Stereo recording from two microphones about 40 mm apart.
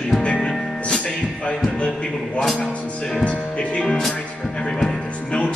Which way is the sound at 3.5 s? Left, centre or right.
Left.